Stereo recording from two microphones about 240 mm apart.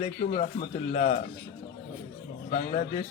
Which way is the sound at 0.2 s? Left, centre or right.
Left.